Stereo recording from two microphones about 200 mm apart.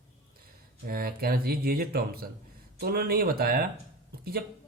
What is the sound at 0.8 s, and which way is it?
Speech, 50° right (ahead or behind).